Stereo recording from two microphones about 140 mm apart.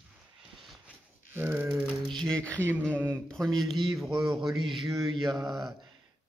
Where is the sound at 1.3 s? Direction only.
15° right (ahead or behind).